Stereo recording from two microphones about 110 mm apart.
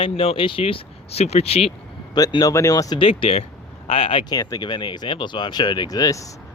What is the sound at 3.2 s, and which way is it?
Speech, 70° left (ahead or behind).